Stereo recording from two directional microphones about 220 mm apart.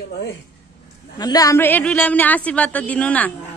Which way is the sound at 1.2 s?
15° left (ahead or behind).